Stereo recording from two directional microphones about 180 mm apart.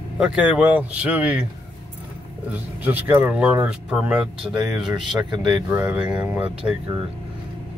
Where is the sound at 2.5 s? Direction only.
10° right (ahead or behind).